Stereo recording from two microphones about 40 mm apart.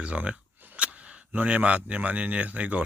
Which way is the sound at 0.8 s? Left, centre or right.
Right.